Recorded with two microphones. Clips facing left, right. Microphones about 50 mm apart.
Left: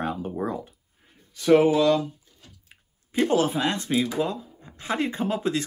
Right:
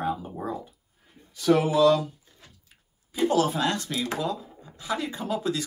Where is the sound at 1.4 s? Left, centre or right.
Left.